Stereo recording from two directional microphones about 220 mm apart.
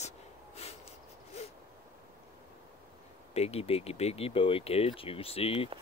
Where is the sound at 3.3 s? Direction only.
30° left (ahead or behind).